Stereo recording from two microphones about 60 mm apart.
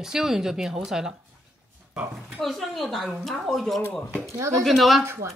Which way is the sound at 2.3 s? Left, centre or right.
Centre.